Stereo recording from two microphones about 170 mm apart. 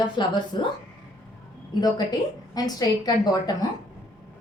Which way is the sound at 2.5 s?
20° left (ahead or behind).